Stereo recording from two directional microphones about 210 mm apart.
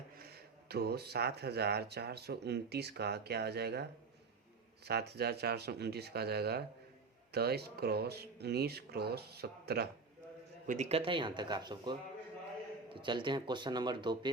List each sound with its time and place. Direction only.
0.2 s speech: 50° right (ahead or behind)
4.9 s speech: 50° right (ahead or behind)
10.7 s speech: 30° right (ahead or behind)